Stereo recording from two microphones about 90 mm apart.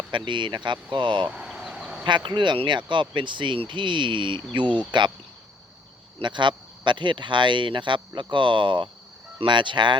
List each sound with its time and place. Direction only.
0.1 s speech: 60° right (ahead or behind)
1.3 s a sound: 10° right (ahead or behind)
2.0 s speech: 60° right (ahead or behind)
6.1 s speech: 60° right (ahead or behind)